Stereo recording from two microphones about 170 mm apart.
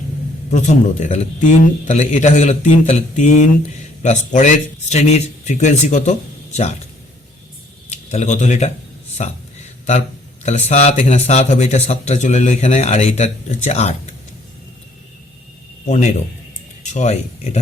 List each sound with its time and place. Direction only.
0.5 s a man's voice: 45° left (ahead or behind)
7.9 s speech: 45° left (ahead or behind)
9.1 s a sound: 40° left (ahead or behind)
10.4 s a man's voice: 40° left (ahead or behind)
15.9 s a man's voice: 40° left (ahead or behind)